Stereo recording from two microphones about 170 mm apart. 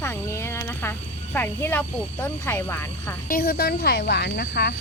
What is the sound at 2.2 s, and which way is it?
Speech, 15° left (ahead or behind).